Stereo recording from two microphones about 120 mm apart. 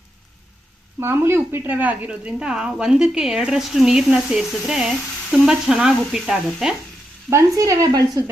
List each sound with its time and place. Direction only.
0.9 s speech: 20° right (ahead or behind); by 6.7 s 5° right (ahead or behind)
7.3 s speech: 25° right (ahead or behind)